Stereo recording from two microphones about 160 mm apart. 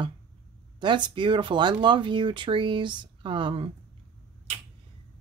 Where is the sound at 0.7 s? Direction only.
30° right (ahead or behind).